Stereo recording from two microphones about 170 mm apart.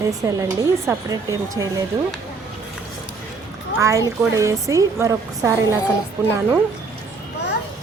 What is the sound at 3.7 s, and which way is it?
Speech, 15° right (ahead or behind).